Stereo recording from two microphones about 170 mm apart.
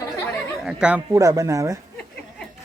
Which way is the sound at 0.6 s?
5° right (ahead or behind).